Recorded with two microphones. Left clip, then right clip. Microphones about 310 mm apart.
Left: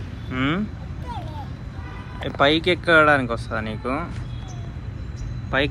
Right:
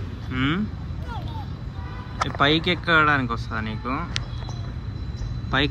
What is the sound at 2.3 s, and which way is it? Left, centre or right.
Speech, centre.